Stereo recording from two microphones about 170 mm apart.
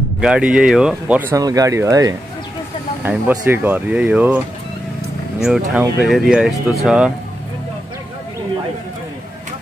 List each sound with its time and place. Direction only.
0.2 s speech: 5° right (ahead or behind)
1.3 s speech: 20° right (ahead or behind)
5.8 s speech: centre (ahead or behind)